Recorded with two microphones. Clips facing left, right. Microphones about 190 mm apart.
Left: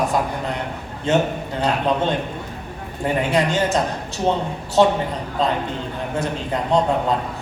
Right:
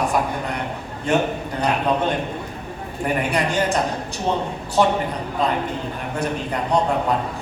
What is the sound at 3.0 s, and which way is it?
Speech, 20° left (ahead or behind).